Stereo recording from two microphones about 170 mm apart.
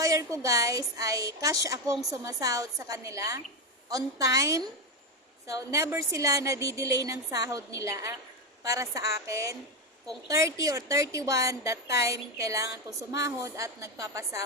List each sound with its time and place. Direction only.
0.0 s a woman's voice: 20° right (ahead or behind)